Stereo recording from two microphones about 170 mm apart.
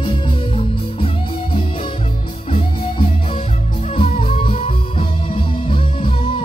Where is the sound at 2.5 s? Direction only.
30° left (ahead or behind).